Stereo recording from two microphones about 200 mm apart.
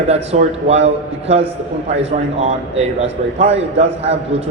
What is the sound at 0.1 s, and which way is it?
A man's voice, 30° right (ahead or behind).